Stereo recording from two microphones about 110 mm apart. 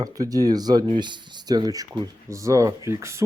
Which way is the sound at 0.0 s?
35° right (ahead or behind).